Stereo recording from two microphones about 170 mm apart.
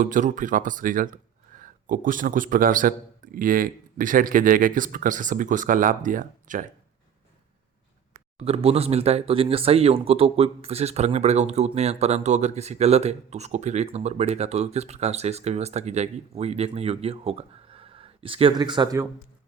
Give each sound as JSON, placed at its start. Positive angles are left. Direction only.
{"t": 0.0, "sound": "speech", "side_deg": -50}
{"t": 8.4, "sound": "speech", "side_deg": -35}